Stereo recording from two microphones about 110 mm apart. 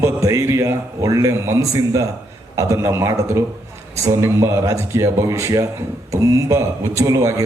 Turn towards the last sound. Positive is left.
turn(degrees=-30)  # may be behind; listen again after turning